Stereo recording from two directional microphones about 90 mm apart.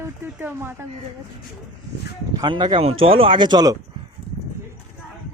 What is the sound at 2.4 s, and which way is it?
Speech, 65° right (ahead or behind).